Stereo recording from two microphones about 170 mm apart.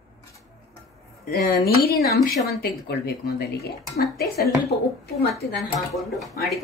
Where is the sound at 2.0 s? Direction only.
65° left (ahead or behind).